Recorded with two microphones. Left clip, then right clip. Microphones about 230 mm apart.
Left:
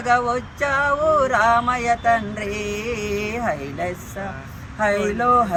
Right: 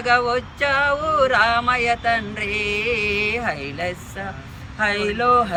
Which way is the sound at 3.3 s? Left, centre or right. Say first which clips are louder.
Right 1 dB; centre.